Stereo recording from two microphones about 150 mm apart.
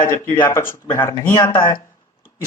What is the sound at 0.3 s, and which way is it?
Speech, 25° left (ahead or behind).